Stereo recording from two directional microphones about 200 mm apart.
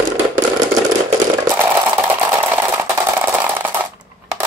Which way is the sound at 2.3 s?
10° right (ahead or behind).